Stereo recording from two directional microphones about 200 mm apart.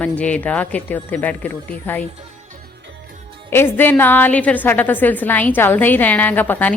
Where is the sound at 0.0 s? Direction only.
5° left (ahead or behind).